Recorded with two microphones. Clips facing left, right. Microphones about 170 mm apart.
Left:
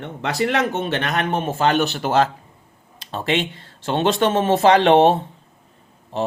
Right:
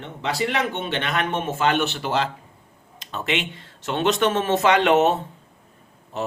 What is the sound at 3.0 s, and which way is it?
Speech, 35° left (ahead or behind).